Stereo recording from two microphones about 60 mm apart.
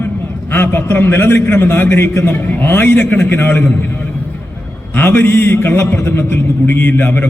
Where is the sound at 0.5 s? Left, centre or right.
Left.